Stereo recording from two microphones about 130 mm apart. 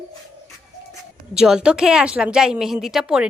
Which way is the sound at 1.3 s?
5° right (ahead or behind).